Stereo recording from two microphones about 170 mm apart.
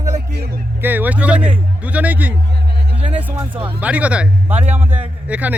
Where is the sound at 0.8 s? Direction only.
10° right (ahead or behind).